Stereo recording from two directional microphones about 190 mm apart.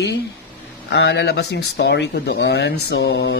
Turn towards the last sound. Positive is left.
turn(degrees=65)  # may be behind; listen again after turning